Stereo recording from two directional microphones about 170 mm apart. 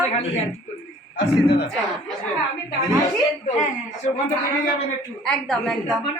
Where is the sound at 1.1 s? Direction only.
75° left (ahead or behind).